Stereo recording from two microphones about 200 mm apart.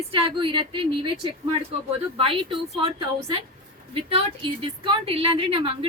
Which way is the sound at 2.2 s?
25° right (ahead or behind).